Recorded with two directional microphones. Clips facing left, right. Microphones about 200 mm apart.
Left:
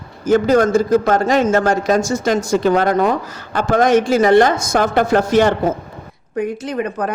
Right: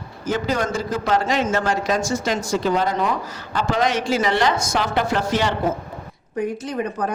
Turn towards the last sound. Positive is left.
turn(degrees=65)  # may be behind; listen again after turning